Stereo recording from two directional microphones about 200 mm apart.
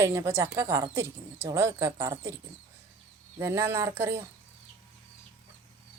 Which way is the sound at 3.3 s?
15° right (ahead or behind).